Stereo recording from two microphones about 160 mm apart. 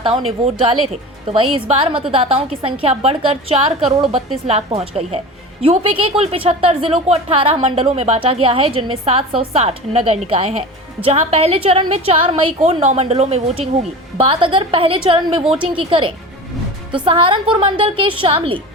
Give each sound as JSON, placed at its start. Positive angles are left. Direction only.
{"t": 0.0, "sound": "a woman's voice", "side_deg": -30}